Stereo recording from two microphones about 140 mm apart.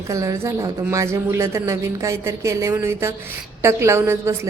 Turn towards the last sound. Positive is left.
turn(degrees=-20)  # may be behind; listen again after turning